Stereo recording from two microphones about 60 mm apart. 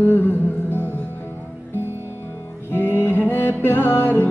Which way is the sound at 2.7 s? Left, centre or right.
Left.